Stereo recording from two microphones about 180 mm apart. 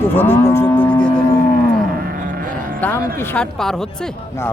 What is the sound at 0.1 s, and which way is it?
Livestock, 10° left (ahead or behind).